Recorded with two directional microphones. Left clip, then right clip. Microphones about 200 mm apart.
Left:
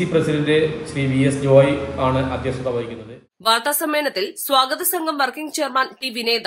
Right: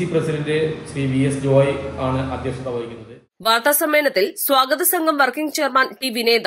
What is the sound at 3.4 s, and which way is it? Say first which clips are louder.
A woman's voice: right 2 dB; 20° right (ahead or behind).